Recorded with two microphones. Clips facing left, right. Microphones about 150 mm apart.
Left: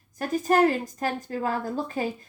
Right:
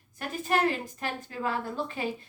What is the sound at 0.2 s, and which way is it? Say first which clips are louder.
A woman's voice: left 6 dB; 40° left (ahead or behind).